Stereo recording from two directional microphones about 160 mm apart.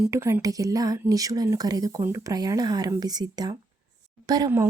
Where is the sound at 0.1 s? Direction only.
15° right (ahead or behind).